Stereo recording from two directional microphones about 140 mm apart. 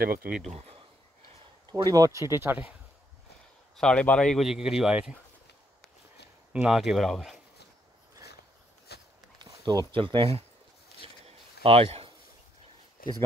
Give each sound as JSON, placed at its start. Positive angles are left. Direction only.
{"t": 0.0, "sound": "speech", "side_deg": -90}
{"t": 0.5, "sound": "speech", "side_deg": -50}
{"t": 1.7, "sound": "speech", "side_deg": -25}
{"t": 3.7, "sound": "speech", "side_deg": 5}
{"t": 6.5, "sound": "speech", "side_deg": -5}
{"t": 9.4, "sound": "speech", "side_deg": -30}
{"t": 11.2, "sound": "a sound", "side_deg": -45}
{"t": 13.0, "sound": "a sound", "side_deg": 90}